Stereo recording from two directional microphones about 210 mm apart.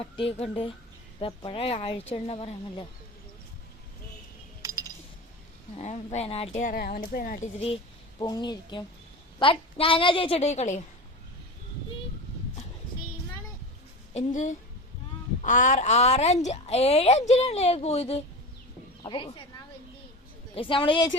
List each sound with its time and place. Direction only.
0.2 s speech: 25° left (ahead or behind)
4.6 s music: 20° right (ahead or behind)
5.7 s speech: 30° left (ahead or behind)
6.6 s speech: 45° left (ahead or behind)
7.4 s speech: 25° left (ahead or behind)
14.1 s a woman's voice: 35° left (ahead or behind)
20.6 s speech: 25° left (ahead or behind)